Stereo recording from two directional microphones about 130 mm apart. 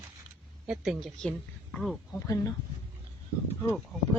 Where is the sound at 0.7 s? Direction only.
Centre (ahead or behind).